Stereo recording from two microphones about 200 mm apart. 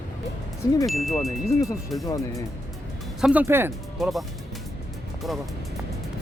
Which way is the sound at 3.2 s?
5° right (ahead or behind).